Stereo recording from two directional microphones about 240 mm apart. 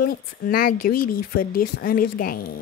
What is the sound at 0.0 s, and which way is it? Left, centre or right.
Speech, left.